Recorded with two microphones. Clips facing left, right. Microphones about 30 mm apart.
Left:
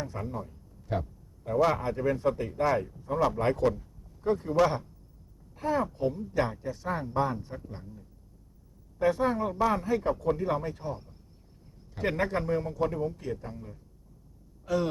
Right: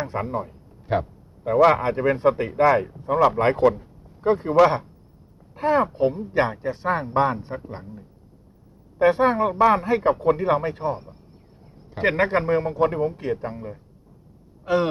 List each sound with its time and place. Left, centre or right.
0.0 s a man's voice: right
14.6 s vehicle: right